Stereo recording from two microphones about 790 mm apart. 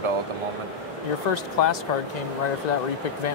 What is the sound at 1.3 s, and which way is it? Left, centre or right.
Speech, left.